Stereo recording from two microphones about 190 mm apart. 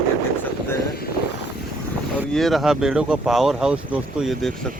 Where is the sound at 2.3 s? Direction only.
Centre (ahead or behind).